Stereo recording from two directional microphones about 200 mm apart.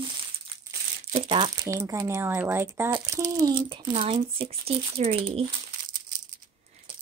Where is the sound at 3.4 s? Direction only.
25° right (ahead or behind).